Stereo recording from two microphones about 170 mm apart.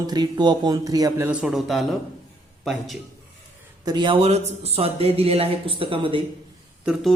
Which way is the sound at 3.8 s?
25° right (ahead or behind).